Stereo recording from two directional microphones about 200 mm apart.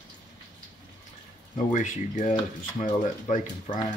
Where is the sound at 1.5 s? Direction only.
40° left (ahead or behind).